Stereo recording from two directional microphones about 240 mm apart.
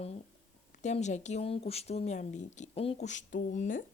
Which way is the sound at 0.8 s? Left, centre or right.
Left.